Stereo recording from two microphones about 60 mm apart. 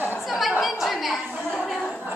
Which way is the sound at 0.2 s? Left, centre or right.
Centre.